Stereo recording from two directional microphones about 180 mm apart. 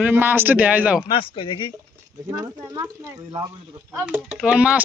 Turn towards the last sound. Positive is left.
turn(degrees=-5)  # may be behind; listen again after turning